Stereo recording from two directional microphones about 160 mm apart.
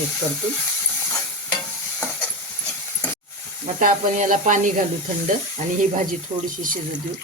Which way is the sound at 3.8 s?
55° right (ahead or behind).